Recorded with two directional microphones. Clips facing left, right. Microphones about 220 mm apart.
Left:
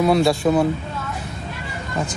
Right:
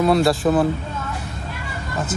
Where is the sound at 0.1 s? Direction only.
Centre (ahead or behind).